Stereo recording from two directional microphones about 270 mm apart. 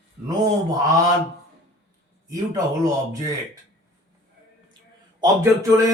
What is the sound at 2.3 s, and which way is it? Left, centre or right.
Speech, centre.